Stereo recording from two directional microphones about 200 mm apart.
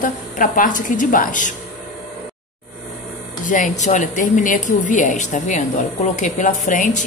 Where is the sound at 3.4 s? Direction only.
40° left (ahead or behind).